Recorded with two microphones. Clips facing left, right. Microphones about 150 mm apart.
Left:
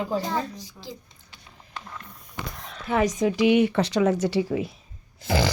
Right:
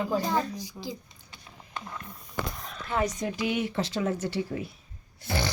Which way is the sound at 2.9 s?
90° left.